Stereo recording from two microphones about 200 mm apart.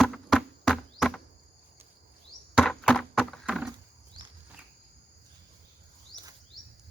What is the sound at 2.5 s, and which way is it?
Chop, centre (ahead or behind).